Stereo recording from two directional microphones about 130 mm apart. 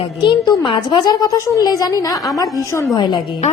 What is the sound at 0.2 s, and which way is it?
A woman's voice, 35° left (ahead or behind).